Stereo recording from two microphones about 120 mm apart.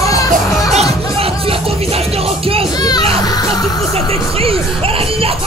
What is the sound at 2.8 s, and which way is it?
Children playing, 35° left (ahead or behind).